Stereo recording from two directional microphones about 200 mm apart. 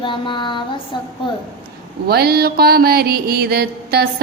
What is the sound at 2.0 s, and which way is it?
A woman's voice, 50° right (ahead or behind).